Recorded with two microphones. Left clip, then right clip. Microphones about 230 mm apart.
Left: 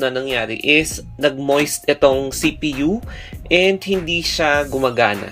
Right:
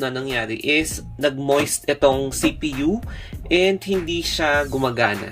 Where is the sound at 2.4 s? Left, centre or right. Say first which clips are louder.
Left 2 dB; right.